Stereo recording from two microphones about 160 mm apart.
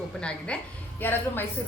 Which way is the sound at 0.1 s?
5° left (ahead or behind).